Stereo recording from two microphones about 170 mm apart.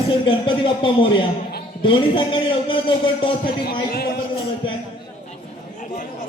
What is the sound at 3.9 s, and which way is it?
Speech, 65° left (ahead or behind).